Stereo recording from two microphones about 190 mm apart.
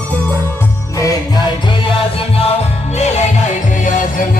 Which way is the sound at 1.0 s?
20° left (ahead or behind).